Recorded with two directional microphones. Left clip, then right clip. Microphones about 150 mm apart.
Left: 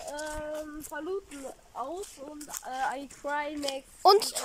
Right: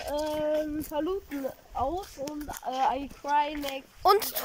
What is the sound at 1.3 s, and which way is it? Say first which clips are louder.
Speech: right 8 dB; 65° right (ahead or behind).